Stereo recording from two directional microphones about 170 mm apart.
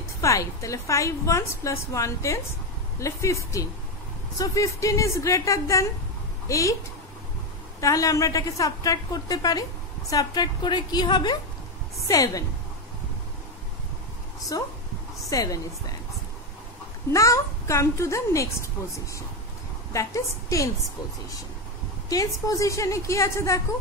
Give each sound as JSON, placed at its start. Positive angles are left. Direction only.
{"t": 0.2, "sound": "a woman's voice", "side_deg": 20}
{"t": 7.8, "sound": "a woman's voice", "side_deg": 20}
{"t": 14.5, "sound": "a woman's voice", "side_deg": 20}
{"t": 17.1, "sound": "a woman's voice", "side_deg": 20}
{"t": 19.9, "sound": "a woman's voice", "side_deg": 20}
{"t": 22.1, "sound": "a woman's voice", "side_deg": 20}